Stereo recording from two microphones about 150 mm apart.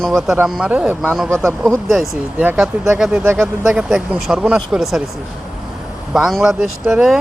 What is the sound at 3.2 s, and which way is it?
Speech, 15° right (ahead or behind).